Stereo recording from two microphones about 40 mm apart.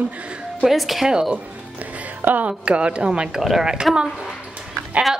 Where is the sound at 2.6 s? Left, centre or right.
Right.